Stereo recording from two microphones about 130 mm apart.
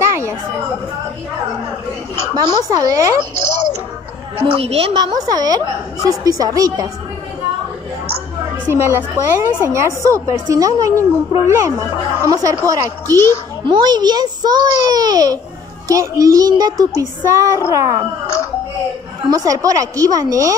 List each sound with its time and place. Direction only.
0.0 s chatter: 20° right (ahead or behind)
2.3 s a child's voice: 25° right (ahead or behind)
4.5 s a woman's voice: 50° right (ahead or behind)
4.9 s a child's voice: 30° right (ahead or behind)
8.7 s a child's voice: 20° right (ahead or behind)
19.2 s a child's voice: 25° right (ahead or behind)